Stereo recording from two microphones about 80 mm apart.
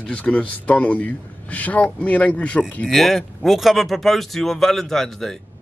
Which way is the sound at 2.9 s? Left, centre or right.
Centre.